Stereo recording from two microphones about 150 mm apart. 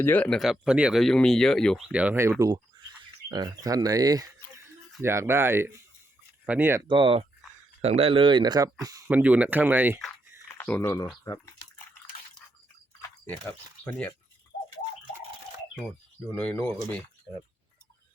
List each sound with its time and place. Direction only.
0.0 s speech: 10° left (ahead or behind)
1.9 s speech: 10° right (ahead or behind)
6.8 s speech: 35° right (ahead or behind)
9.0 s speech: 10° right (ahead or behind)
10.5 s speech: 15° left (ahead or behind)
13.0 s a sound: 10° left (ahead or behind)
16.3 s speech: 10° left (ahead or behind)